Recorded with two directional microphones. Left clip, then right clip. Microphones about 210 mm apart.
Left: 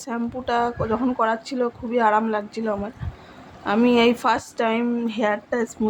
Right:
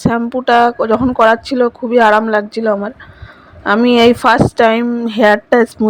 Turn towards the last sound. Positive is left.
turn(degrees=-35)  # may be behind; listen again after turning